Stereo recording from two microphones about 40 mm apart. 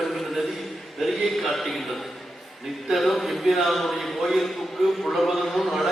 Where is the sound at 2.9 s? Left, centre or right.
Centre.